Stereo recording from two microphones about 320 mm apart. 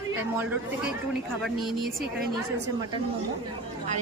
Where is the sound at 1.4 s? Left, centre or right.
Centre.